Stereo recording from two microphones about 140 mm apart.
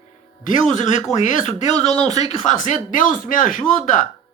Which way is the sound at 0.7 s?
55° left (ahead or behind).